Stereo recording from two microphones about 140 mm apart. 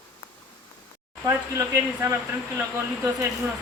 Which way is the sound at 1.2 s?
20° right (ahead or behind).